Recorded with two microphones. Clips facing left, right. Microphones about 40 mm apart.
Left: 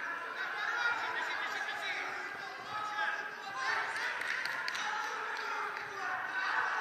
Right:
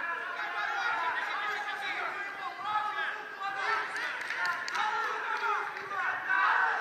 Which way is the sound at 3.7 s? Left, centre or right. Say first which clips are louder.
Right 2 dB; right.